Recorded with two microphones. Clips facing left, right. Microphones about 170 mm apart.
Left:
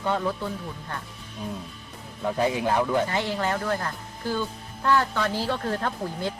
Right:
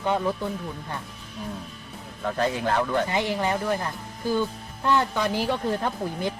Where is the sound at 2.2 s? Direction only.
10° left (ahead or behind).